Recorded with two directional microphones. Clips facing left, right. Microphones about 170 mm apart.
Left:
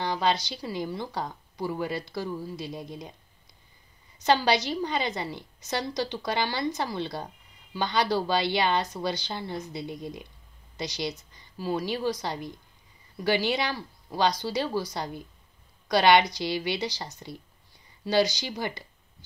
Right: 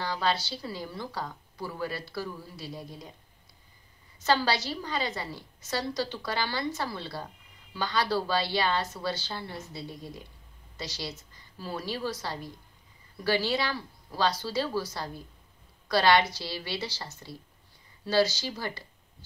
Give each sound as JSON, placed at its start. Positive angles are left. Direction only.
{"t": 0.0, "sound": "a woman's voice", "side_deg": 20}
{"t": 4.2, "sound": "a woman's voice", "side_deg": 20}